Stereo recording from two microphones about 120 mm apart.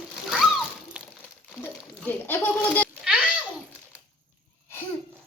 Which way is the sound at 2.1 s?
15° left (ahead or behind).